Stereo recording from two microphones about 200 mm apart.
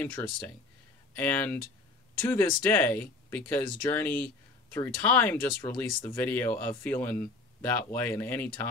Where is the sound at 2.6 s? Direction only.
10° left (ahead or behind).